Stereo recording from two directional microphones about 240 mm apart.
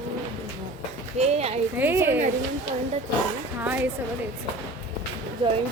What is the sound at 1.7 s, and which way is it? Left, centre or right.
Speech, centre.